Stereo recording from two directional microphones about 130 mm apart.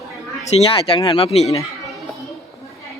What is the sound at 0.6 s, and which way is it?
Speech, 45° left (ahead or behind).